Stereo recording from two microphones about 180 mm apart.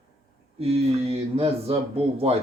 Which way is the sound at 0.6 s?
35° right (ahead or behind).